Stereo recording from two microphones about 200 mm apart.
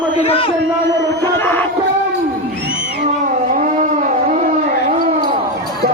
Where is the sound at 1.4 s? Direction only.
10° left (ahead or behind).